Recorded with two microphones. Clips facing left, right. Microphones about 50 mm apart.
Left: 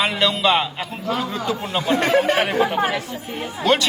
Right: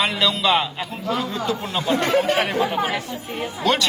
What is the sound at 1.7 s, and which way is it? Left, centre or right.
Speech, centre.